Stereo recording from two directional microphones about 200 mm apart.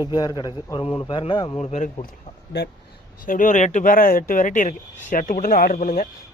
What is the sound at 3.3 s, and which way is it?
A man's voice, 40° left (ahead or behind).